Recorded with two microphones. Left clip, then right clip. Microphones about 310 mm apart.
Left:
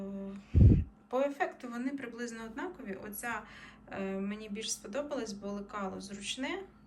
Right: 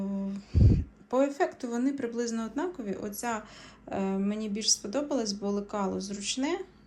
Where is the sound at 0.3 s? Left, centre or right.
Centre.